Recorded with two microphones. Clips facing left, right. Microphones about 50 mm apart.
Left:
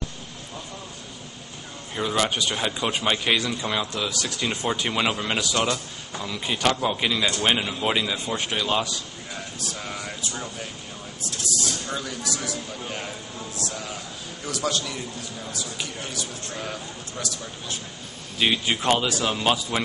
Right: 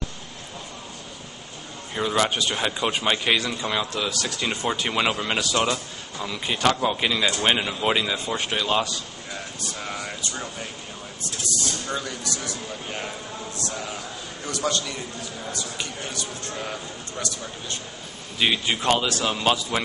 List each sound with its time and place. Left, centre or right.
2.0 s a man's voice: centre
11.9 s a man's voice: centre
14.4 s a man's voice: centre
18.4 s a man's voice: centre